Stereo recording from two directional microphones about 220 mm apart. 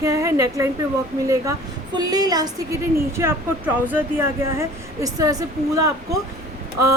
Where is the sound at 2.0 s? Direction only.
15° right (ahead or behind).